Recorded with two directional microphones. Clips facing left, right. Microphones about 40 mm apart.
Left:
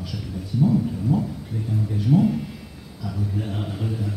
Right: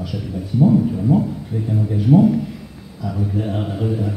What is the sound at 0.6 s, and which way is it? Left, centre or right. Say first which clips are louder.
Speech: right 6 dB; right.